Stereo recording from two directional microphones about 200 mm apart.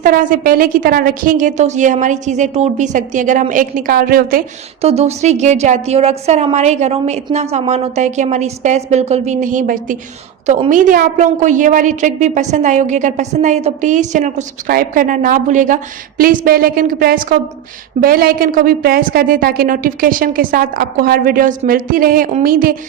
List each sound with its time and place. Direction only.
0.0 s a woman's voice: 45° right (ahead or behind)
4.8 s a woman's voice: 30° right (ahead or behind)